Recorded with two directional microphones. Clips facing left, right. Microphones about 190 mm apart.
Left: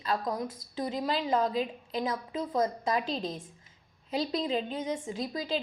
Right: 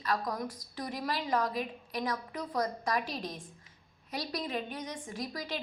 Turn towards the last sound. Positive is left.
turn(degrees=25)  # may be behind; listen again after turning